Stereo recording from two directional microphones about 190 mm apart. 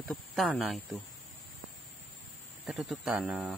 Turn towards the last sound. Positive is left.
turn(degrees=-5)  # may be behind; listen again after turning